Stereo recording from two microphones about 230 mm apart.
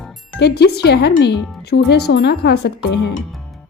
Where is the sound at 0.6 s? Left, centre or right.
Left.